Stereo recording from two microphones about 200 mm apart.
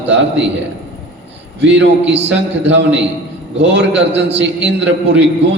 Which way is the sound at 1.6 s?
60° right (ahead or behind).